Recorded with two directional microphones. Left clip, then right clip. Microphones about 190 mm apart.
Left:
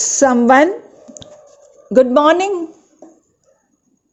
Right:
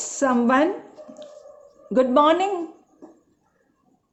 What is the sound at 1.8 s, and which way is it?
Speech, 35° left (ahead or behind).